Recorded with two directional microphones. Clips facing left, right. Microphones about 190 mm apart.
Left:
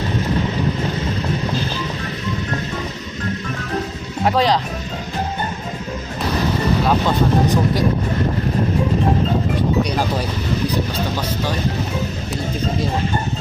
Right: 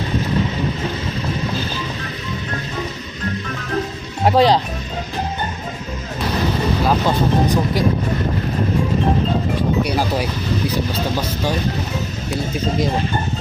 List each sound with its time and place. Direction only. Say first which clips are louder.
4.3 s speech: right 3 dB; 30° right (ahead or behind)
9.8 s speech: right 1 dB; 10° right (ahead or behind)